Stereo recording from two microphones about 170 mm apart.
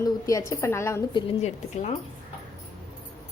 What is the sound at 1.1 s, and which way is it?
Speech, 30° left (ahead or behind).